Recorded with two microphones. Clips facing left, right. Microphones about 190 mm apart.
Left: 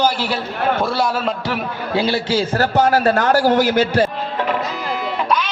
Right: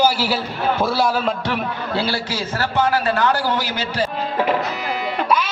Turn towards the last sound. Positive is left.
turn(degrees=50)  # may be behind; listen again after turning